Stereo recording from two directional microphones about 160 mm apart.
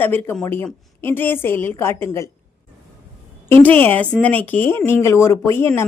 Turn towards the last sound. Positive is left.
turn(degrees=15)  # may be behind; listen again after turning